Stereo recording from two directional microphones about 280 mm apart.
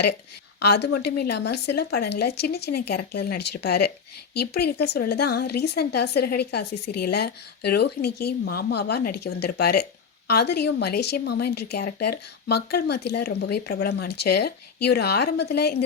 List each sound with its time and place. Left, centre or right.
0.6 s a woman's voice: left